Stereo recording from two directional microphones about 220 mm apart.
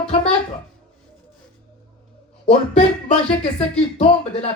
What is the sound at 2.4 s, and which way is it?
Speech, 30° left (ahead or behind).